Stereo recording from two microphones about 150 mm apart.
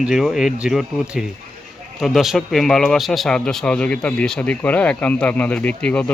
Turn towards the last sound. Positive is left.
turn(degrees=10)  # may be behind; listen again after turning